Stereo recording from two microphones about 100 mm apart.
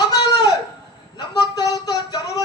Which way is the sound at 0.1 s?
40° left (ahead or behind).